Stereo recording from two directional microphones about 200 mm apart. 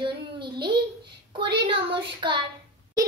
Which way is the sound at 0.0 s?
25° right (ahead or behind).